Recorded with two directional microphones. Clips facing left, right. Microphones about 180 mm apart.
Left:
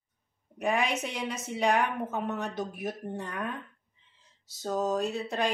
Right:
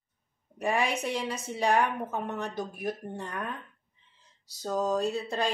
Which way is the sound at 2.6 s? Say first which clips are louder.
Right 1 dB; centre (ahead or behind).